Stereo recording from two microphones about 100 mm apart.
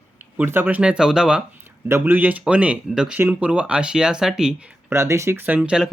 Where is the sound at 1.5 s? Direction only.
20° right (ahead or behind).